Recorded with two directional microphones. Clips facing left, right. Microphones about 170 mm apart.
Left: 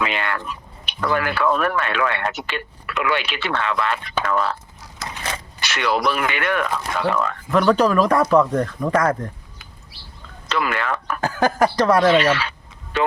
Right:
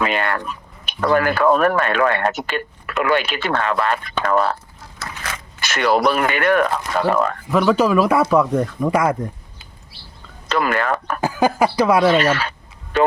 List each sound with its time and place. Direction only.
0.0 s speech: 45° right (ahead or behind)
5.0 s a sound: 30° left (ahead or behind)
5.5 s speech: 45° right (ahead or behind)
7.5 s speech: 5° right (ahead or behind)
10.5 s speech: 45° right (ahead or behind)
11.2 s speech: 10° right (ahead or behind)
12.1 s a sound: 45° right (ahead or behind)